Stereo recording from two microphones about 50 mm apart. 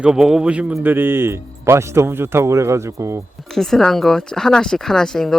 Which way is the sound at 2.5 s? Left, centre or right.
Right.